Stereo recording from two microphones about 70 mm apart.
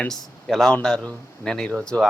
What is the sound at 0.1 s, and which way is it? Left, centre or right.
Speech, centre.